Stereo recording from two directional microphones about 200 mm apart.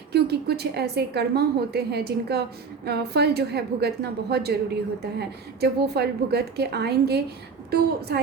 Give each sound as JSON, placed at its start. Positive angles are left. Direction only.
{"t": 0.1, "sound": "a woman's voice", "side_deg": -55}